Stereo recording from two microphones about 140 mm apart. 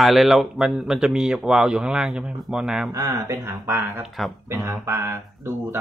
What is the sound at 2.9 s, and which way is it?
Speech, 25° right (ahead or behind).